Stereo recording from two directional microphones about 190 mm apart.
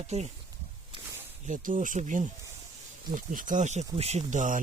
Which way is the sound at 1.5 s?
45° right (ahead or behind).